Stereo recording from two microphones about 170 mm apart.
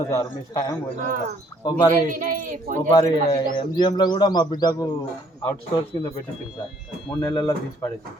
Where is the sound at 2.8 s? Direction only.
30° left (ahead or behind).